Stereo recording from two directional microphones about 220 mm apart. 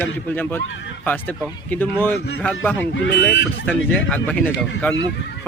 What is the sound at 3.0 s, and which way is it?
Speech, 50° left (ahead or behind).